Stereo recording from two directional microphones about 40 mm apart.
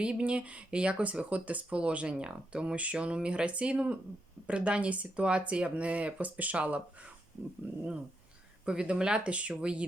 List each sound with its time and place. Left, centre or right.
0.0 s speech: right
7.6 s dog: right
8.6 s speech: right